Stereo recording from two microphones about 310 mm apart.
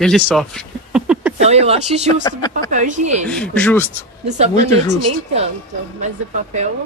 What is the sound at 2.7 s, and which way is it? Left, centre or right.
Speech, right.